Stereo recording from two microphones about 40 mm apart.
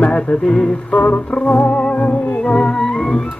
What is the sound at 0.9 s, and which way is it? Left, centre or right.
Music, left.